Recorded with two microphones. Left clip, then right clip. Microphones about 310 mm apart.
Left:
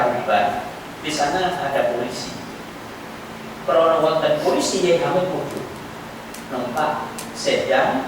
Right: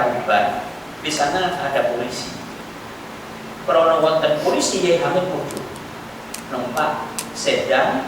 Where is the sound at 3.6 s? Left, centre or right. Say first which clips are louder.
Right 1 dB; centre.